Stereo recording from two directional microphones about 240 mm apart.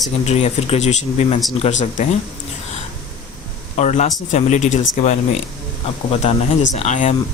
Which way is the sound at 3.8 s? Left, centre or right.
Left.